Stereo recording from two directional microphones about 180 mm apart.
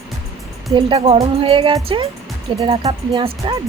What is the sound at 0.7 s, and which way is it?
Speech, 25° right (ahead or behind).